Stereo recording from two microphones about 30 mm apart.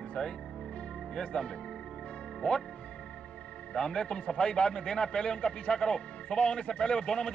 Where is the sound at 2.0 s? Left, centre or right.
Left.